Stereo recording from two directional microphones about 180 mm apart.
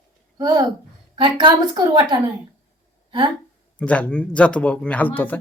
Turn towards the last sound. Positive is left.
turn(degrees=10)  # may be behind; listen again after turning